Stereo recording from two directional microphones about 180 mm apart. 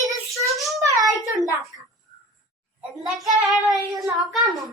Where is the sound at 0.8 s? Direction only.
20° right (ahead or behind).